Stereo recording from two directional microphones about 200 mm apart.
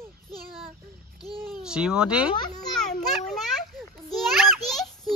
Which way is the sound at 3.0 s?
Centre (ahead or behind).